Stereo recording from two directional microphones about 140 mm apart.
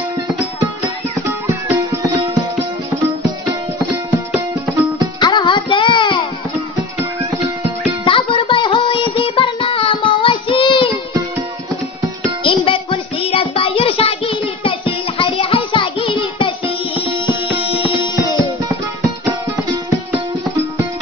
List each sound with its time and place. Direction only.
1.5 s music: 20° right (ahead or behind)
5.2 s a sound: 35° left (ahead or behind)
8.0 s music: 35° left (ahead or behind)
12.4 s music: 40° left (ahead or behind)
19.0 s music: 15° right (ahead or behind)